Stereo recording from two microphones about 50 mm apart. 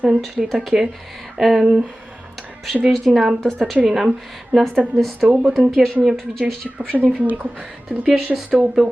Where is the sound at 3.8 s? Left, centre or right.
Centre.